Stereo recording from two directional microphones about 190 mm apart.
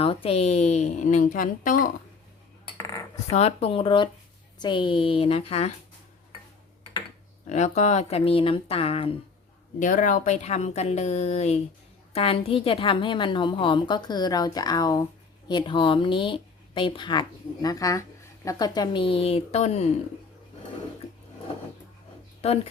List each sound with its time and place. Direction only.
0.0 s a woman's voice: 30° left (ahead or behind)
2.7 s cutlery: 15° left (ahead or behind)
3.2 s a woman's voice: 35° left (ahead or behind)
7.4 s a woman's voice: 40° left (ahead or behind)
9.8 s a woman's voice: 45° left (ahead or behind)
22.4 s a woman's voice: 35° left (ahead or behind)